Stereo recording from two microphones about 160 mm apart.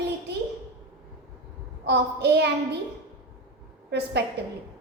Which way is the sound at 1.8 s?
90° right.